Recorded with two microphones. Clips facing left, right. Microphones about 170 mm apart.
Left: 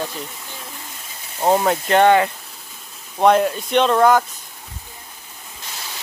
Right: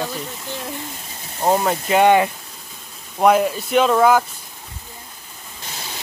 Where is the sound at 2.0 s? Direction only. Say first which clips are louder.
Even; 15° right (ahead or behind).